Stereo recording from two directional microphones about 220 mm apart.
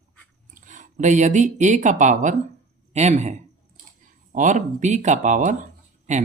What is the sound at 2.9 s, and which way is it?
Clicking, 30° right (ahead or behind).